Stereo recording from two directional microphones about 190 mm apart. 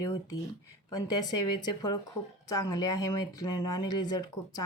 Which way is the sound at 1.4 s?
25° left (ahead or behind).